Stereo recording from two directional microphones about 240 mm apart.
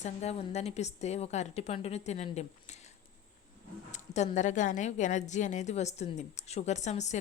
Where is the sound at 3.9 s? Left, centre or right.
Left.